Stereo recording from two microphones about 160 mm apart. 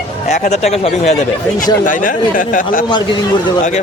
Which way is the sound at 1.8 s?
55° left (ahead or behind).